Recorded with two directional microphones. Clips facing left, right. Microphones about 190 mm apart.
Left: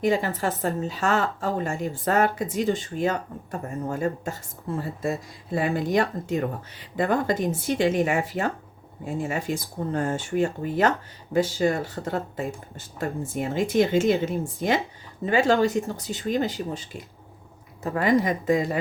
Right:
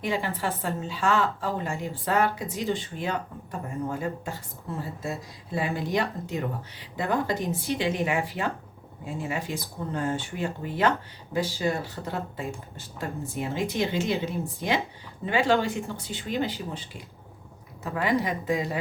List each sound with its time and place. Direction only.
0.0 s a woman's voice: 45° left (ahead or behind)
5.5 s a woman's voice: 50° left (ahead or behind)
17.8 s a woman's voice: 45° left (ahead or behind)